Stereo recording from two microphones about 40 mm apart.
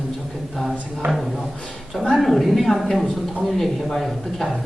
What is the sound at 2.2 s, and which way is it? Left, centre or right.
Speech, centre.